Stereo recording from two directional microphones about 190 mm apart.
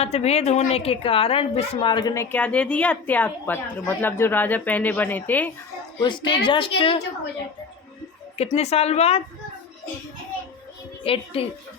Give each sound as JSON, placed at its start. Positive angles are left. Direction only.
{"t": 0.0, "sound": "a woman's voice", "side_deg": 35}
{"t": 2.3, "sound": "a woman's voice", "side_deg": 5}
{"t": 6.0, "sound": "speech", "side_deg": 25}
{"t": 8.4, "sound": "a woman's voice", "side_deg": 35}
{"t": 11.0, "sound": "speech", "side_deg": 30}